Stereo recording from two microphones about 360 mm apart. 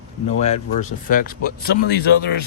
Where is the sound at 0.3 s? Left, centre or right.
Centre.